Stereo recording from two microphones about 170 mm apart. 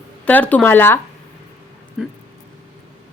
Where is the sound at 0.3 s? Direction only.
10° left (ahead or behind).